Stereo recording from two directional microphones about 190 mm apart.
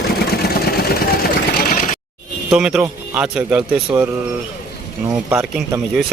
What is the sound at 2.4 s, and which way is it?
Speech, 5° right (ahead or behind).